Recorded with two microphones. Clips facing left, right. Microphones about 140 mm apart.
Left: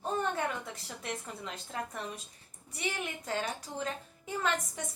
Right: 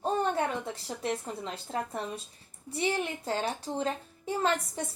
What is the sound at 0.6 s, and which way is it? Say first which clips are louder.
A child's voice: right 7 dB; 30° right (ahead or behind).